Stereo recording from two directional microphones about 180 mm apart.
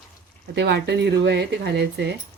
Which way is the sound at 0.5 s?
70° right (ahead or behind).